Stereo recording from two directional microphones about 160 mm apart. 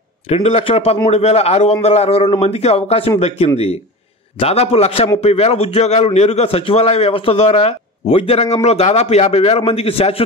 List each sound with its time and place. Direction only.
0.3 s a man's voice: 40° left (ahead or behind)